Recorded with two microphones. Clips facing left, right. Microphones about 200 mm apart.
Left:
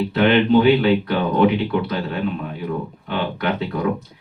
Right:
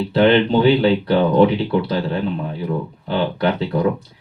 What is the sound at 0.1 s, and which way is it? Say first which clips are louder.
Speech: right 2 dB; 35° right (ahead or behind).